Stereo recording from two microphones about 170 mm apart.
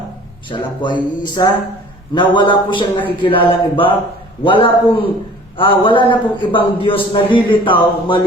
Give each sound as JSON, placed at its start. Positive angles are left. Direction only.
{"t": 0.5, "sound": "a man's voice", "side_deg": 30}
{"t": 3.2, "sound": "a sound", "side_deg": 30}
{"t": 5.5, "sound": "a man's voice", "side_deg": 30}